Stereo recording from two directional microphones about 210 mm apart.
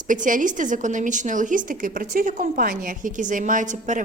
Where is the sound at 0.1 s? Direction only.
40° right (ahead or behind).